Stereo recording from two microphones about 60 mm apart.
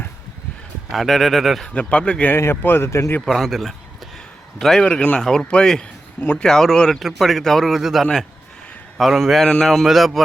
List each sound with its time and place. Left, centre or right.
0.9 s speech: centre
1.6 s speech: left
2.3 s speech: left
3.2 s speech: centre
6.1 s speech: left
6.4 s speech: centre